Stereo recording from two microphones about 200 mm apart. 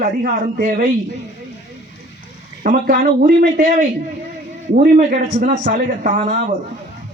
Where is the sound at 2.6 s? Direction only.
45° right (ahead or behind).